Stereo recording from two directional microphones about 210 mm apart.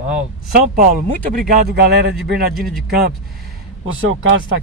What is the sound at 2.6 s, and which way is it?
Speech, centre (ahead or behind).